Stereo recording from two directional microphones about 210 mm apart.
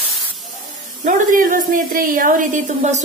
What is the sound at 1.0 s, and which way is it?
A woman's voice, 40° right (ahead or behind).